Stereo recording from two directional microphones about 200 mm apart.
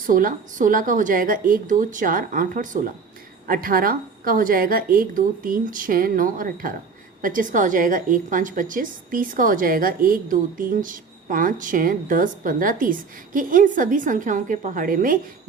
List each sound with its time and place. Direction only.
0.0 s a woman's voice: 45° right (ahead or behind)